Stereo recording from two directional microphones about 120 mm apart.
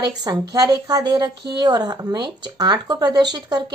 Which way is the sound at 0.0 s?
35° right (ahead or behind).